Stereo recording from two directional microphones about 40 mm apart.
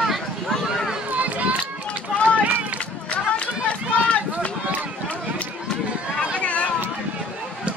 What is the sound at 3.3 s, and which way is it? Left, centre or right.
Run, left.